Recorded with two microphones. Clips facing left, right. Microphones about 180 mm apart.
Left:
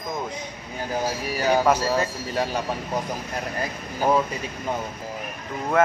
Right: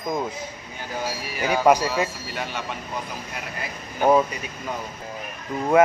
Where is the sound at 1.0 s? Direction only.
40° left (ahead or behind).